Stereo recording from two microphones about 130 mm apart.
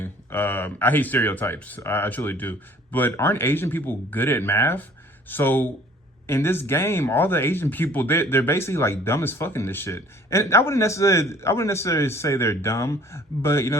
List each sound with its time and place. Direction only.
0.0 s speech: 15° left (ahead or behind)